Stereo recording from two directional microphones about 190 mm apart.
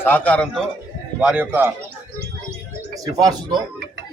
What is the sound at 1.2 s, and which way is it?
Speech, 5° right (ahead or behind).